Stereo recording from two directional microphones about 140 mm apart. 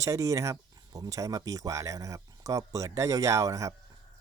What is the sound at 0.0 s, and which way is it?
Speech, 20° right (ahead or behind).